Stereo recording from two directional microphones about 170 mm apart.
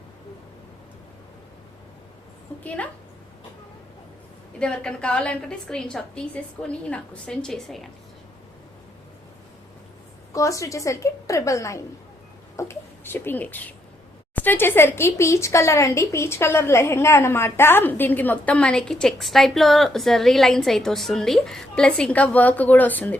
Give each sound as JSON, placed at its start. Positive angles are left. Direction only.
{"t": 4.6, "sound": "a woman's voice", "side_deg": 5}
{"t": 10.3, "sound": "a woman's voice", "side_deg": 20}